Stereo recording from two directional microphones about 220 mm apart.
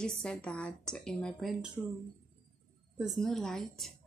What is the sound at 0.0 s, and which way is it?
A woman's voice, 5° left (ahead or behind).